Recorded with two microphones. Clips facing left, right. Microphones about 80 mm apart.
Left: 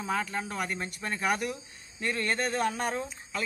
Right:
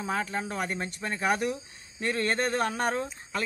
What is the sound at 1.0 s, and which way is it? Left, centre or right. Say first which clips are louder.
Speech: right 2 dB; right.